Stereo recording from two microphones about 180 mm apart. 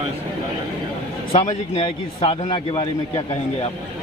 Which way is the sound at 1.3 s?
30° left (ahead or behind).